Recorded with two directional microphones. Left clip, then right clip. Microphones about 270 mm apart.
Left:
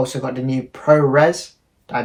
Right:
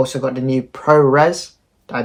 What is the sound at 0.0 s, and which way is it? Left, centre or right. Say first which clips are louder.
Speech: right 4 dB; centre.